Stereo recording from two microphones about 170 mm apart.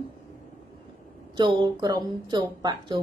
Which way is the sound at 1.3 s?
25° right (ahead or behind).